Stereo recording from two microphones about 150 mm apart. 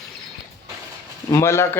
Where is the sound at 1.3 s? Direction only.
15° left (ahead or behind).